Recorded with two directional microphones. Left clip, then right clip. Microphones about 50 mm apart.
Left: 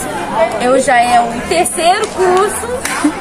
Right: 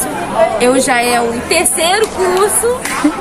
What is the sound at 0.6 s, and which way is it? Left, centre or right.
A woman's voice, centre.